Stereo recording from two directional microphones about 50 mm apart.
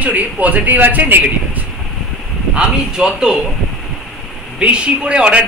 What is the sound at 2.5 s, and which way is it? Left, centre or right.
Speech, centre.